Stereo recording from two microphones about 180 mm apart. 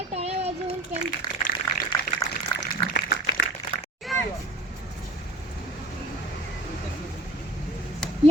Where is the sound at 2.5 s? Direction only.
80° left.